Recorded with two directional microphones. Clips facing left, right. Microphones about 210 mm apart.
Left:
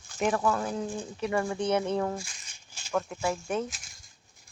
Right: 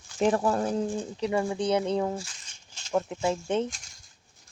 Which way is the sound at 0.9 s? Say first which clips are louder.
Right 2 dB; 20° right (ahead or behind).